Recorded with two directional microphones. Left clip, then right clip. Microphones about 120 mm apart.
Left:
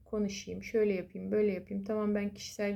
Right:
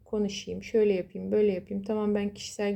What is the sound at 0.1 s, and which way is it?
Speech, 20° right (ahead or behind).